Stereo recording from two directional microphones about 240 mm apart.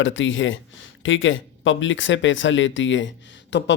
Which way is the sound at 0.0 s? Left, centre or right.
Left.